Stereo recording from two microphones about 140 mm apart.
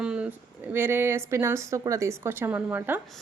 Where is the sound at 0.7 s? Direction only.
15° right (ahead or behind).